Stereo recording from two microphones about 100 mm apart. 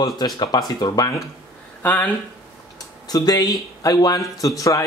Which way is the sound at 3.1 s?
40° left (ahead or behind).